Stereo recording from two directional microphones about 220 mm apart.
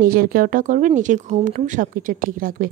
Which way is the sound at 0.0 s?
40° right (ahead or behind).